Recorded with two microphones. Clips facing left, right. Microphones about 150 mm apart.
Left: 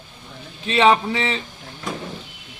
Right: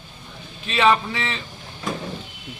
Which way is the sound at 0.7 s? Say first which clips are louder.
Left 3 dB; 25° left (ahead or behind).